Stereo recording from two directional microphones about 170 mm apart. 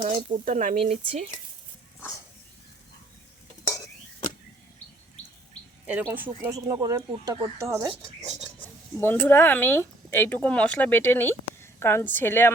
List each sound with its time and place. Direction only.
0.0 s speech: 45° right (ahead or behind)
5.8 s speech: 10° right (ahead or behind)
9.0 s speech: 10° left (ahead or behind)